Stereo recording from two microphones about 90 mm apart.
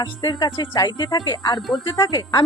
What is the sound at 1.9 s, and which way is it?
Speech, 50° left (ahead or behind).